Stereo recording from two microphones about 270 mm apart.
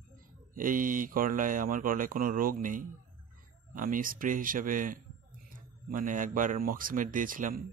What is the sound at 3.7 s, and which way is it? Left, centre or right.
Speech, right.